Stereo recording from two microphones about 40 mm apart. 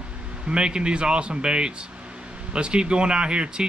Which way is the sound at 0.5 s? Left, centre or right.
Right.